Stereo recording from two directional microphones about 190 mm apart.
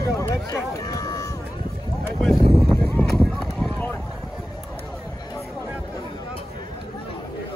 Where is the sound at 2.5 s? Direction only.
5° left (ahead or behind).